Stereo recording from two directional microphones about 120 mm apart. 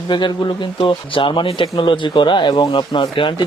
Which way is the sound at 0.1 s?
40° left (ahead or behind).